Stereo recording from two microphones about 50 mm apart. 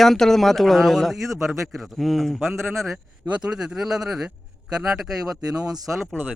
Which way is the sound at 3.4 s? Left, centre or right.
Centre.